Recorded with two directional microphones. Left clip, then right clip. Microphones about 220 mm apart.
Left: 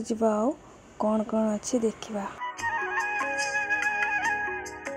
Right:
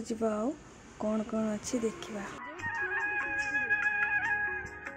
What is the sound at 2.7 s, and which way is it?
Music, 35° left (ahead or behind).